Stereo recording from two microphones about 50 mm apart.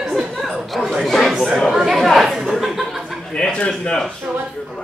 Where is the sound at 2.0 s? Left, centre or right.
Centre.